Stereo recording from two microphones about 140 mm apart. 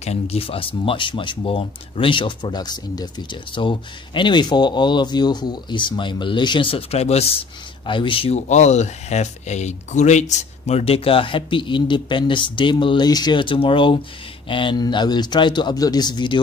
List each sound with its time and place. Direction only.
0.0 s speech: 50° left (ahead or behind)
8.4 s speech: 55° left (ahead or behind); by 16.3 s 30° left (ahead or behind)